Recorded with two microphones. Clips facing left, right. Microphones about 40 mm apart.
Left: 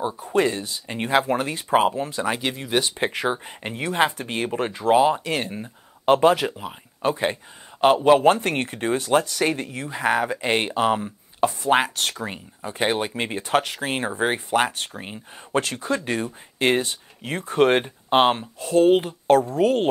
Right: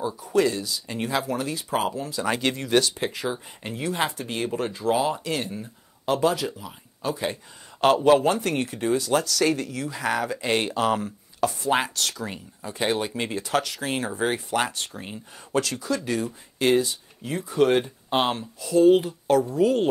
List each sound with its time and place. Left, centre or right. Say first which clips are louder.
0.0 s speech: left 1 dB; left
2.2 s speech: even; centre
2.8 s speech: left 3 dB; left
7.8 s a man's voice: left 2 dB; left
8.2 s speech: left 4 dB; left
11.4 s speech: left 4 dB; left